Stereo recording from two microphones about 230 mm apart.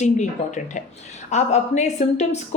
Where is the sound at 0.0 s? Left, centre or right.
Left.